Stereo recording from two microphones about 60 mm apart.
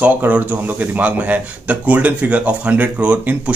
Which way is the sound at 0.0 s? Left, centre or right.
Right.